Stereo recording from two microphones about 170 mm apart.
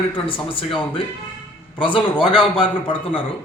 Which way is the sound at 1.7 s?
30° left (ahead or behind).